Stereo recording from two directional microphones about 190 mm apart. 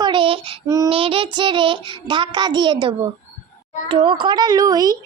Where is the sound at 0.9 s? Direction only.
30° right (ahead or behind).